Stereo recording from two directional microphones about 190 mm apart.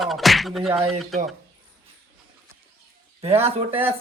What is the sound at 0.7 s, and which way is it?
Speech, 30° right (ahead or behind).